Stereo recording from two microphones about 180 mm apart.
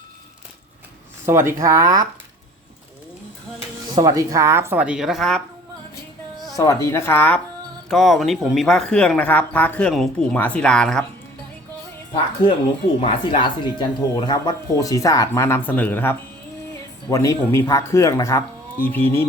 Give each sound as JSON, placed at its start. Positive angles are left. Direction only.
{"t": 1.2, "sound": "speech", "side_deg": -15}
{"t": 3.9, "sound": "speech", "side_deg": -20}
{"t": 6.6, "sound": "speech", "side_deg": 20}
{"t": 12.1, "sound": "a woman's voice", "side_deg": 30}